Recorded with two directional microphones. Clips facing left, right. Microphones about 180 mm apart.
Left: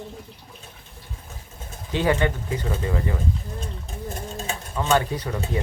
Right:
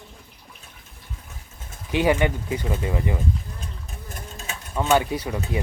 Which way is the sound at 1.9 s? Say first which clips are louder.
Right 2 dB; 15° right (ahead or behind).